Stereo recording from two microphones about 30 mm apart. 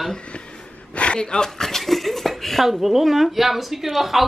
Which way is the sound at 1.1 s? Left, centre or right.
Left.